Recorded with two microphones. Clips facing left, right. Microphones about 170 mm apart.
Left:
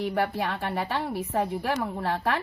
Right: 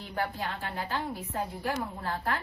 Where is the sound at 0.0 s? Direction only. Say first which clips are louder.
Left 7 dB; 70° left (ahead or behind).